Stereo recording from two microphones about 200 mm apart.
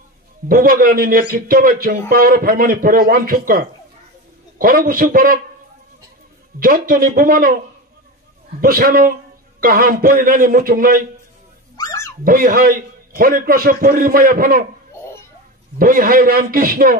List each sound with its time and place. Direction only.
0.5 s a man's voice: 45° right (ahead or behind)
6.6 s a man's voice: 45° right (ahead or behind)
8.5 s a man's voice: 45° right (ahead or behind)
11.7 s a sound: 15° left (ahead or behind)
12.3 s a man's voice: 45° right (ahead or behind)
15.8 s a man's voice: 45° right (ahead or behind)